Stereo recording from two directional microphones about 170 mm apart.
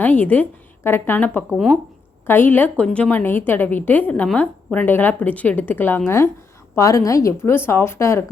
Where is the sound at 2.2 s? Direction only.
10° left (ahead or behind).